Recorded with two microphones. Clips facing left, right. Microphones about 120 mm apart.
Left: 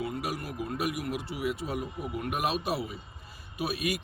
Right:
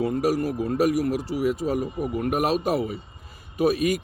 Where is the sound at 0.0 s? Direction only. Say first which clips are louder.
Right 11 dB; 40° right (ahead or behind).